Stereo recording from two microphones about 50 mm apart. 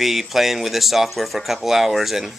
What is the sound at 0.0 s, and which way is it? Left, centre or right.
Speech, centre.